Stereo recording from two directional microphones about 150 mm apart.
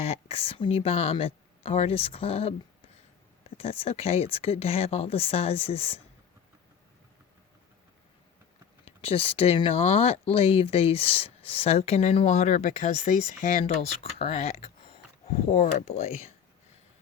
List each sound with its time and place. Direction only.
0.0 s speech: 40° left (ahead or behind)
3.6 s speech: 40° left (ahead or behind)
8.8 s speech: 40° left (ahead or behind)